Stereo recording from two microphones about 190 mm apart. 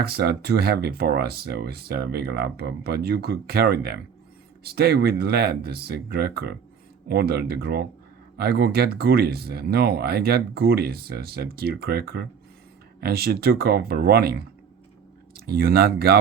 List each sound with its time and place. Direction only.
0.0 s speech: 55° right (ahead or behind)